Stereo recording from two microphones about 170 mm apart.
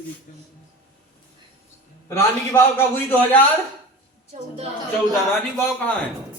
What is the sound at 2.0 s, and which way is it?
Speech, 15° left (ahead or behind).